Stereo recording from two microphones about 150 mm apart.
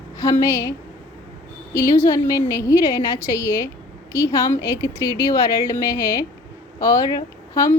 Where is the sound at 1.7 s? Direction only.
20° left (ahead or behind).